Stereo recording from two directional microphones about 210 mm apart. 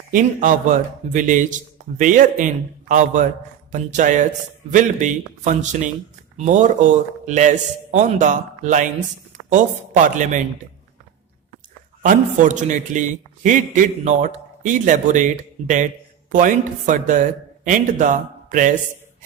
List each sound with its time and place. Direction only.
0.1 s a man's voice: 40° right (ahead or behind)
3.7 s a man's voice: 35° right (ahead or behind)
12.0 s a man's voice: 35° right (ahead or behind)